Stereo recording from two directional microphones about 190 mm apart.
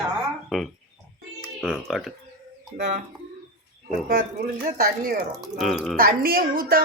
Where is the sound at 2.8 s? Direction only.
40° right (ahead or behind).